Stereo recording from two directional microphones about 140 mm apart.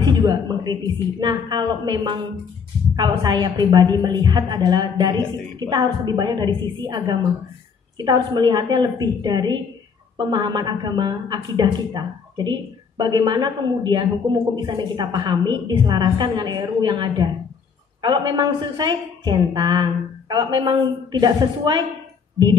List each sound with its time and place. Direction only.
0.0 s a woman's voice: 30° right (ahead or behind)